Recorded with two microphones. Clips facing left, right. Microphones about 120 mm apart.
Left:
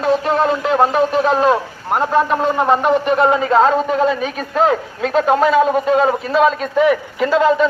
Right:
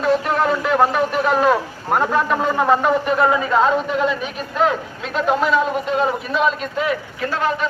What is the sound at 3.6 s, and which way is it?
A man's voice, 35° left (ahead or behind).